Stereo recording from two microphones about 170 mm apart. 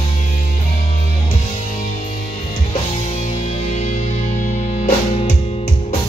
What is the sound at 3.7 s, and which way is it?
Music, 45° left (ahead or behind).